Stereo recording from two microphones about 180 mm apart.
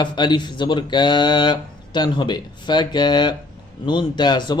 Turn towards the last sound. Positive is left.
turn(degrees=25)  # may be behind; listen again after turning